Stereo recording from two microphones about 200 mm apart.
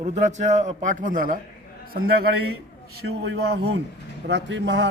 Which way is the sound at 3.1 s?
55° right (ahead or behind).